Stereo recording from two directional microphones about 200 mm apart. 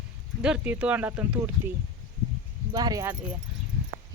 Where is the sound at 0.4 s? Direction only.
5° right (ahead or behind).